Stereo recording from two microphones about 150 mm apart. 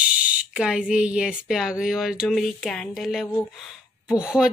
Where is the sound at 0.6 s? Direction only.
5° right (ahead or behind).